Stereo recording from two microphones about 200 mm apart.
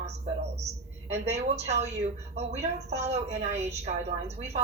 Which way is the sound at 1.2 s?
35° right (ahead or behind).